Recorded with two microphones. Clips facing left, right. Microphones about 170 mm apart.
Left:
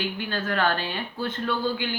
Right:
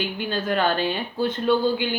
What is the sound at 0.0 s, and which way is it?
Speech, 20° right (ahead or behind).